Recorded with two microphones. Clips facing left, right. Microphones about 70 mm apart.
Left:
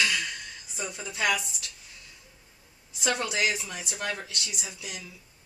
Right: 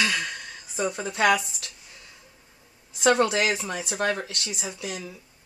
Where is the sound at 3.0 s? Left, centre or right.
Right.